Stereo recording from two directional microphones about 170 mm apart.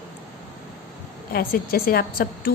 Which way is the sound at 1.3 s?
60° left (ahead or behind).